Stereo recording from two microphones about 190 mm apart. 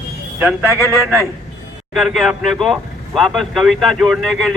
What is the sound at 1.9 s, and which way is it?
Speech, centre (ahead or behind).